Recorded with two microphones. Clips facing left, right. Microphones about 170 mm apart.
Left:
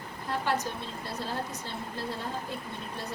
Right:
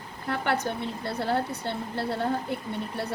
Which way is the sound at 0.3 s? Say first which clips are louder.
Right 3 dB; 65° right (ahead or behind).